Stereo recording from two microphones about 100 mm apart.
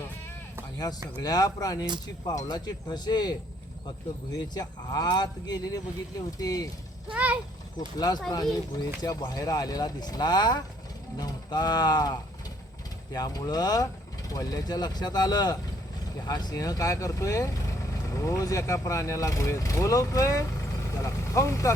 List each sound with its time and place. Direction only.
1.2 s speech: 40° left (ahead or behind)
7.1 s speech: 15° right (ahead or behind)
7.8 s speech: 40° left (ahead or behind)
13.1 s speech: 40° left (ahead or behind)